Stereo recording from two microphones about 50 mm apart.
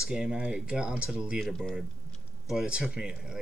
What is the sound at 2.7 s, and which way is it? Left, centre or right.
Speech, centre.